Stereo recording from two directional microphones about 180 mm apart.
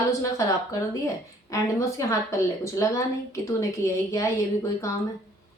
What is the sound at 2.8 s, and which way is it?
Speech, 15° left (ahead or behind).